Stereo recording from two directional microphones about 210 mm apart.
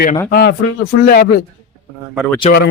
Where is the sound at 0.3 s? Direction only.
50° left (ahead or behind).